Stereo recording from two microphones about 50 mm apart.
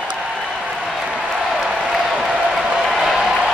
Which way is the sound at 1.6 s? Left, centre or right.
Centre.